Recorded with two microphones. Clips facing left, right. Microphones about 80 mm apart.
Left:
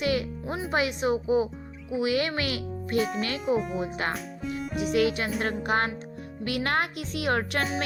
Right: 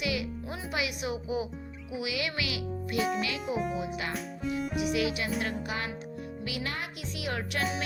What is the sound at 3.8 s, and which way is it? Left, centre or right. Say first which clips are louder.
Speech: left 4 dB; left.